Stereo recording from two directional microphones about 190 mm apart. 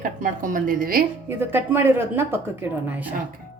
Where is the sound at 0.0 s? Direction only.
45° right (ahead or behind).